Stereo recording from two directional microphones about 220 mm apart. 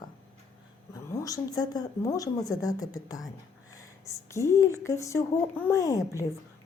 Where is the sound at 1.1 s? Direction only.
15° left (ahead or behind).